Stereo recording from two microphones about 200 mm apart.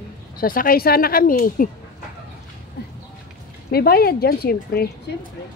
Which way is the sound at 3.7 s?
50° left (ahead or behind).